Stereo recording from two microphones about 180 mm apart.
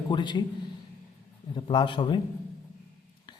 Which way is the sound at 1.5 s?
25° left (ahead or behind).